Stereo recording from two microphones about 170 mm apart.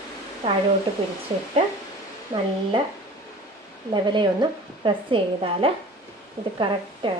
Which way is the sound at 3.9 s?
30° right (ahead or behind).